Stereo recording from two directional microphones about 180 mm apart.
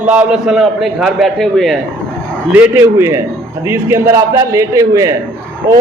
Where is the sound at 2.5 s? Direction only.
10° right (ahead or behind).